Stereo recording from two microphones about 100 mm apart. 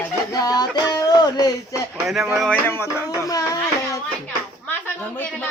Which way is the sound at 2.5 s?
20° left (ahead or behind).